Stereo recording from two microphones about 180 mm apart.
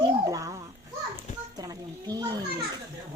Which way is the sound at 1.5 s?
20° right (ahead or behind).